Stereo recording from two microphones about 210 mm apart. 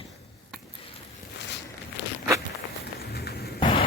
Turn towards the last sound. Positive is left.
turn(degrees=45)  # may be behind; listen again after turning